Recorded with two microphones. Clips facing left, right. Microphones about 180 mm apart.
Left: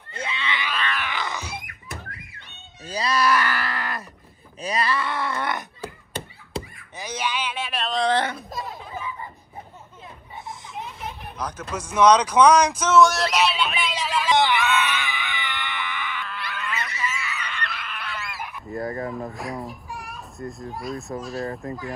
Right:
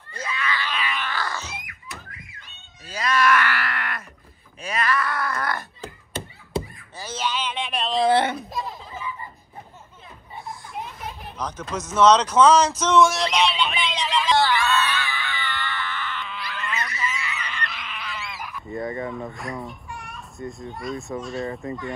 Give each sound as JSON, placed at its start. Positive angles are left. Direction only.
{"t": 0.1, "sound": "a sound", "side_deg": 25}
{"t": 0.7, "sound": "roaring cats", "side_deg": 0}
{"t": 1.0, "sound": "a sound", "side_deg": 15}
{"t": 2.9, "sound": "groan", "side_deg": 35}
{"t": 4.6, "sound": "wail", "side_deg": 35}
{"t": 7.0, "sound": "a sound", "side_deg": 15}
{"t": 11.3, "sound": "speech", "side_deg": 10}
{"t": 14.4, "sound": "screaming", "side_deg": 20}
{"t": 16.3, "sound": "goose", "side_deg": 0}
{"t": 21.2, "sound": "speech", "side_deg": 0}